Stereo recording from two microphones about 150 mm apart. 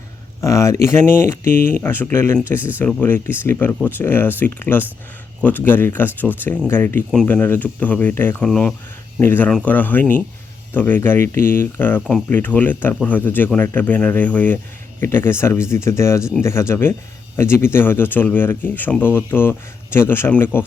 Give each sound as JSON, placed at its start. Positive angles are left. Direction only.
{"t": 0.4, "sound": "speech", "side_deg": 20}
{"t": 1.5, "sound": "speech", "side_deg": -55}
{"t": 1.7, "sound": "speech", "side_deg": 15}